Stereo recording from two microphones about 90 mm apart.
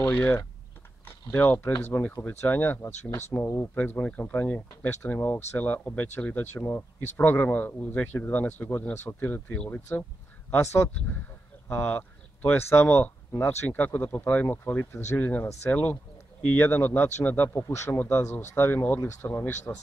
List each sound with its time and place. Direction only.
1.3 s speech: 20° left (ahead or behind)
3.7 s speech: 20° left (ahead or behind)